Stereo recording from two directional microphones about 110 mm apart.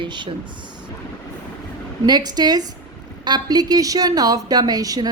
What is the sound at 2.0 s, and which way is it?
A woman's voice, 40° right (ahead or behind).